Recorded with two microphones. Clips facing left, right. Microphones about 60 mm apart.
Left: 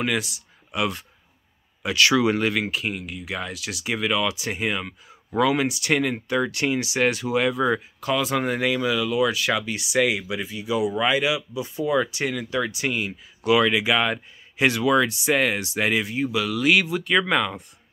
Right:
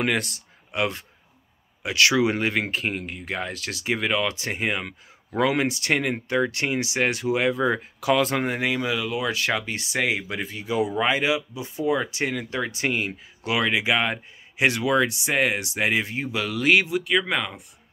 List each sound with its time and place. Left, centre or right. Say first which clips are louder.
0.0 s speech: right 1 dB; right
0.7 s speech: even; right
2.6 s speech: even; right
8.1 s speech: right 2 dB; right
8.4 s speech: left 2 dB; right
13.5 s speech: left 4 dB; right
17.3 s speech: left 4 dB; centre